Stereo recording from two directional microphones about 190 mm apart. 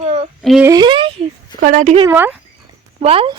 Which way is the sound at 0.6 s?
20° right (ahead or behind).